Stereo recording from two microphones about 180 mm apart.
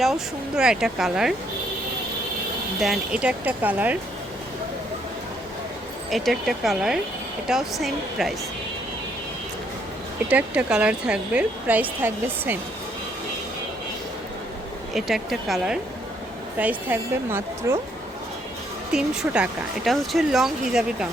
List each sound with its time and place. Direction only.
0.0 s speech: centre (ahead or behind)
2.8 s speech: 5° right (ahead or behind)
6.1 s speech: centre (ahead or behind)
10.2 s speech: 5° right (ahead or behind)
14.9 s speech: centre (ahead or behind)
18.9 s speech: 5° right (ahead or behind)